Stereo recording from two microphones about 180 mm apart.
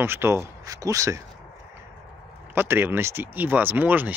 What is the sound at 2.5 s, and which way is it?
Speech, 10° right (ahead or behind).